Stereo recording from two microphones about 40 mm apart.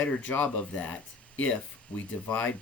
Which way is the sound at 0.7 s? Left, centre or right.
Left.